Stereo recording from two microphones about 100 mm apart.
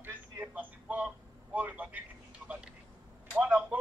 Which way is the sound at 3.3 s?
15° right (ahead or behind).